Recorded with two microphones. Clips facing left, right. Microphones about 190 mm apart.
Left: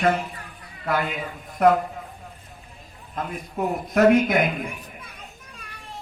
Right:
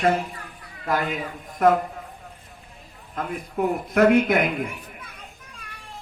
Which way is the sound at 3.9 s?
60° right (ahead or behind).